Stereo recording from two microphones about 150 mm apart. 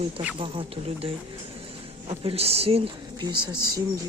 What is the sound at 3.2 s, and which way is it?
Speech, 30° right (ahead or behind).